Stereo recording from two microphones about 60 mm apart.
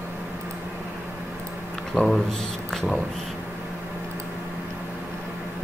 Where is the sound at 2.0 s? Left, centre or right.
Centre.